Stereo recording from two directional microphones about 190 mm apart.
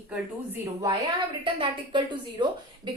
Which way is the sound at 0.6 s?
15° right (ahead or behind).